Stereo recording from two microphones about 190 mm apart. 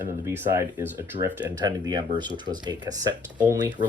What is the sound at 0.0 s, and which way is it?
Speech, 10° right (ahead or behind).